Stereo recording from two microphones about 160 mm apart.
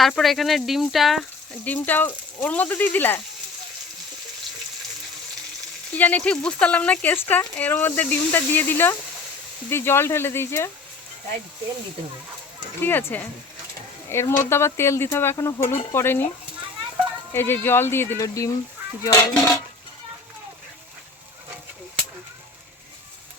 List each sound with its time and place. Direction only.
0.0 s speech: centre (ahead or behind)
1.6 s speech: 10° left (ahead or behind)
5.9 s speech: 10° left (ahead or behind)
12.8 s speech: 15° left (ahead or behind)
17.3 s speech: 15° left (ahead or behind)
19.4 s dishes: 20° left (ahead or behind)